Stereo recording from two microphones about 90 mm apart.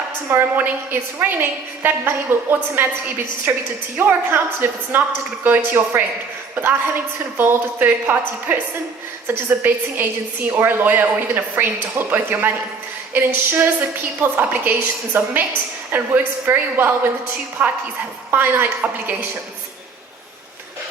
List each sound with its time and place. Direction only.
0.3 s a woman's voice: 20° right (ahead or behind)
7.3 s a woman's voice: 20° right (ahead or behind)